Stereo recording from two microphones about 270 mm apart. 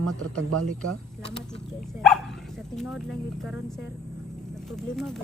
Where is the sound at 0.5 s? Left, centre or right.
Right.